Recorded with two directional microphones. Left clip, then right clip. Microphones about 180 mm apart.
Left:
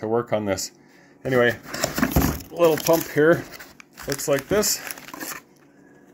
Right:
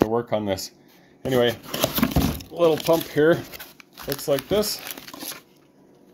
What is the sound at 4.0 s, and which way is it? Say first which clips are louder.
Crumpling: left 1 dB; 15° right (ahead or behind).